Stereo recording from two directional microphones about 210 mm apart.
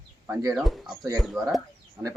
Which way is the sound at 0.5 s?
Centre (ahead or behind).